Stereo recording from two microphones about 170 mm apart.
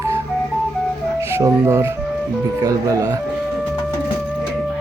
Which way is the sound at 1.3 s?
20° right (ahead or behind).